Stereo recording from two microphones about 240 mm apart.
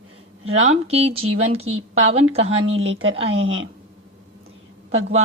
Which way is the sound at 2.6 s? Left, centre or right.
Right.